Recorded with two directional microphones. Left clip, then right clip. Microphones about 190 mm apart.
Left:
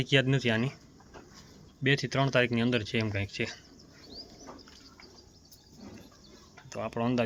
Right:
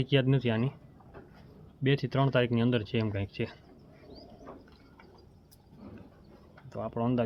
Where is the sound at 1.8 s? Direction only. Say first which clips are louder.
Left 1 dB; 10° right (ahead or behind).